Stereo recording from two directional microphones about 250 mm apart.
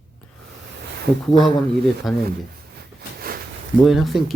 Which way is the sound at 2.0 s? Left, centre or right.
Centre.